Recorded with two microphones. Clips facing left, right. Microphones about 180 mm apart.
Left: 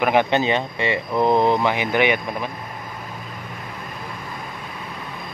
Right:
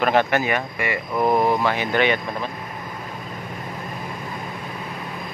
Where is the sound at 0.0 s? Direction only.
15° left (ahead or behind).